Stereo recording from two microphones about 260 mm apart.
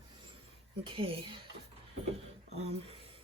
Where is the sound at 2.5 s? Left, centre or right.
Right.